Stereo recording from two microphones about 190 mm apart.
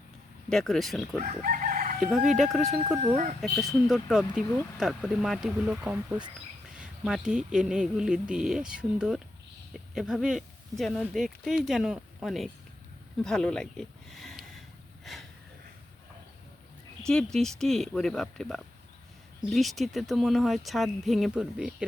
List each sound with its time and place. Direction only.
0.5 s speech: centre (ahead or behind)
1.2 s crowing: 45° right (ahead or behind)
2.0 s speech: centre (ahead or behind)
3.0 s speech: 40° right (ahead or behind)
3.4 s speech: centre (ahead or behind)
15.0 s a sound: centre (ahead or behind)
17.3 s speech: centre (ahead or behind)